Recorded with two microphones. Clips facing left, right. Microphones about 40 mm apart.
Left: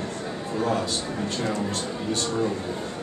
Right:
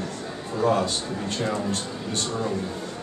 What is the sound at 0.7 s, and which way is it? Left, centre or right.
A man's voice, centre.